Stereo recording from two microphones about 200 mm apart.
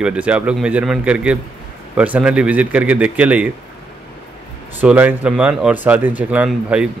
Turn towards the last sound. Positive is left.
turn(degrees=-5)  # may be behind; listen again after turning